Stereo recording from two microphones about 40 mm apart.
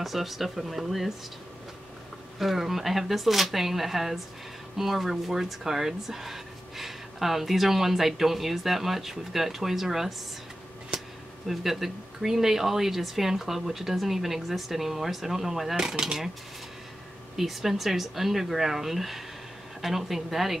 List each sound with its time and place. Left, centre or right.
0.0 s speech: centre
2.3 s speech: centre
11.4 s speech: centre
17.4 s speech: centre